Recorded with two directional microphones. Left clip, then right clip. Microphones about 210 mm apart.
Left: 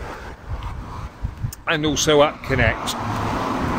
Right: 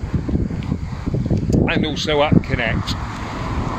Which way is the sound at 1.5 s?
5° right (ahead or behind).